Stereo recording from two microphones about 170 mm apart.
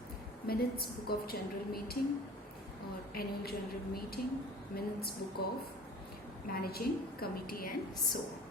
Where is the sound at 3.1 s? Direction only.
65° left (ahead or behind).